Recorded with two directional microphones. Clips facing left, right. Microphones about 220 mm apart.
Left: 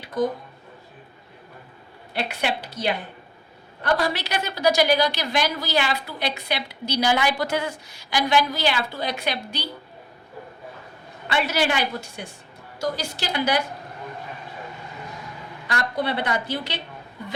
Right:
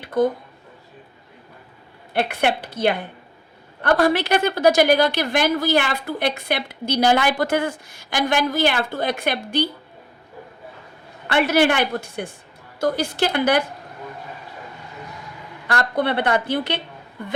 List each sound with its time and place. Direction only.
0.0 s a sound: 55° right (ahead or behind)
2.1 s a woman's voice: 55° right (ahead or behind)
11.3 s a woman's voice: 55° right (ahead or behind)
15.6 s a woman's voice: 55° right (ahead or behind)